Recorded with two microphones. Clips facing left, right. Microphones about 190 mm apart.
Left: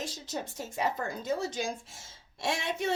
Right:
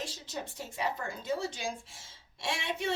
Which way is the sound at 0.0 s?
40° left (ahead or behind).